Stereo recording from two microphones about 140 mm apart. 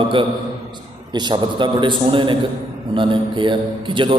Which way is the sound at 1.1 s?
35° right (ahead or behind).